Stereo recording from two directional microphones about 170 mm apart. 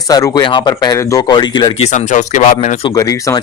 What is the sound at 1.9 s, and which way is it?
Speech, 45° left (ahead or behind).